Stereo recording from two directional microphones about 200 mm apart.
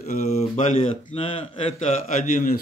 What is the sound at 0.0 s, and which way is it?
Speech, 35° left (ahead or behind).